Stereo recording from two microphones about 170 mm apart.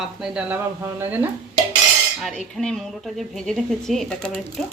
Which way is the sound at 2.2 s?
Centre (ahead or behind).